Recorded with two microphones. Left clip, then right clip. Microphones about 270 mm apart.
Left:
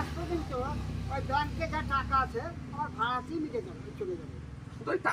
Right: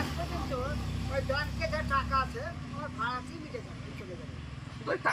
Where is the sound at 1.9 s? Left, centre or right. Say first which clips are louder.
Left 1 dB; left.